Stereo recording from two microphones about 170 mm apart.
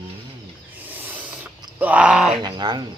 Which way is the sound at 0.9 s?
10° right (ahead or behind).